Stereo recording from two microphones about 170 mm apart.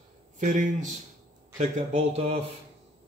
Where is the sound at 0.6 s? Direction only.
45° right (ahead or behind).